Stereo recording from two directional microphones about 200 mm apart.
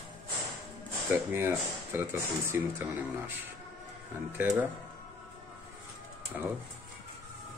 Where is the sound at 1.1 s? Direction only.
10° right (ahead or behind).